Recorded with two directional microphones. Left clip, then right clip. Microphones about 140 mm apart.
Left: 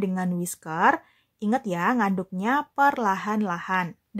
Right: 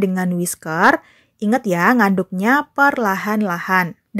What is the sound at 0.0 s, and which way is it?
Speech, 25° right (ahead or behind).